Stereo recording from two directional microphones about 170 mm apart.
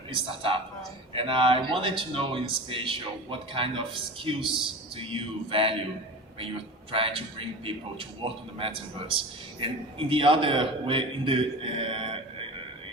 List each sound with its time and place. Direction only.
0.1 s a man's voice: 30° right (ahead or behind)
6.9 s a man's voice: 30° right (ahead or behind)